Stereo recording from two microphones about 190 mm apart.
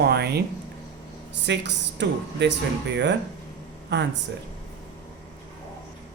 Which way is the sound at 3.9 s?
65° right (ahead or behind).